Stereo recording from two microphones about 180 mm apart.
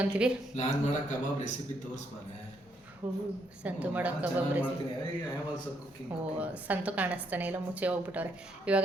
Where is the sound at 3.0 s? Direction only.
10° right (ahead or behind).